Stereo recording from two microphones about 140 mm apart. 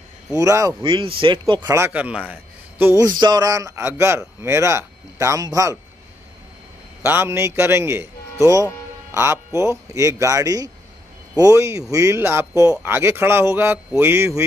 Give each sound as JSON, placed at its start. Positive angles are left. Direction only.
{"t": 0.3, "sound": "speech", "side_deg": -25}
{"t": 0.8, "sound": "speech", "side_deg": -40}
{"t": 1.6, "sound": "a man's voice", "side_deg": -20}
{"t": 3.1, "sound": "speech", "side_deg": -30}
{"t": 7.1, "sound": "a man's voice", "side_deg": -15}